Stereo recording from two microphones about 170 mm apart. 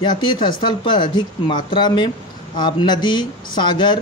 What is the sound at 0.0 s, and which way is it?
Speech, 25° left (ahead or behind).